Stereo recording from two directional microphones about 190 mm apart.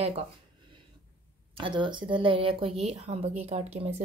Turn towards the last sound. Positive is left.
turn(degrees=-35)  # may be behind; listen again after turning